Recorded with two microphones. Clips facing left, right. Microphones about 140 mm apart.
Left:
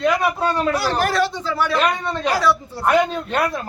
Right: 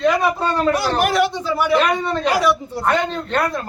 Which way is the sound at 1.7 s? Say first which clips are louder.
Right 5 dB; centre (ahead or behind).